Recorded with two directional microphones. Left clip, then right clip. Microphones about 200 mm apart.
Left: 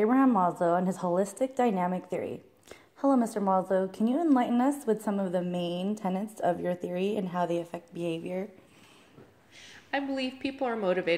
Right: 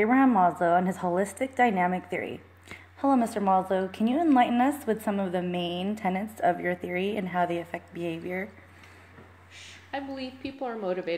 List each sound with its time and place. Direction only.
0.0 s a woman's voice: 20° left (ahead or behind)
9.8 s a woman's voice: 40° left (ahead or behind)